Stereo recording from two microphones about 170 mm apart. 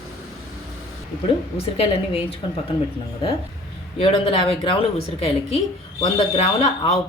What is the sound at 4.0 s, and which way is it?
Speech, 35° left (ahead or behind).